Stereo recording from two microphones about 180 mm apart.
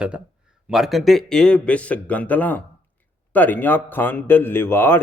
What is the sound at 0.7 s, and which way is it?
A man's voice, centre (ahead or behind).